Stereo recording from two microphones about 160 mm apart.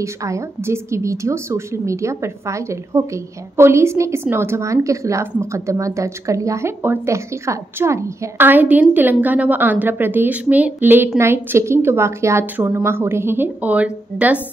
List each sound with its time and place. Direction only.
0.0 s a woman's voice: 20° right (ahead or behind)